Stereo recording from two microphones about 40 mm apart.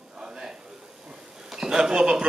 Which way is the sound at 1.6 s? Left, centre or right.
Centre.